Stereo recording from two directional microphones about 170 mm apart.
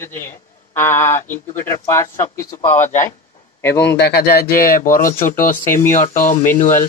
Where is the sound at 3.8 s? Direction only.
80° left.